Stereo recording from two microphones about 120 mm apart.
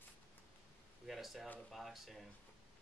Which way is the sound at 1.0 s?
Centre (ahead or behind).